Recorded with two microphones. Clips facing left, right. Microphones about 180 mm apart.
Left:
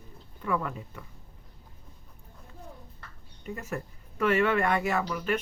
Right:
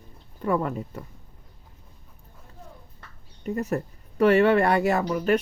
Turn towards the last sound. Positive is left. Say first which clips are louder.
# right 6 dB
turn(degrees=-40)  # may be behind; listen again after turning